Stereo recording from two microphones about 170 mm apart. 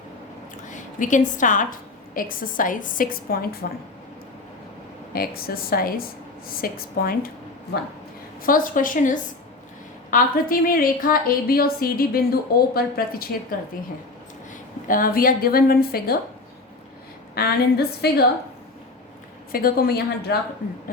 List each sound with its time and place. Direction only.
0.7 s a woman's voice: 50° left (ahead or behind)
5.1 s a woman's voice: 60° left (ahead or behind)
8.4 s a woman's voice: 55° left (ahead or behind)
14.8 s a woman's voice: 55° left (ahead or behind)
17.3 s a woman's voice: 65° left (ahead or behind)
19.5 s a woman's voice: 60° left (ahead or behind)